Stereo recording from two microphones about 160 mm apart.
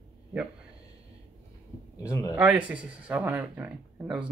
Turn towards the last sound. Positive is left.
turn(degrees=-10)  # may be behind; listen again after turning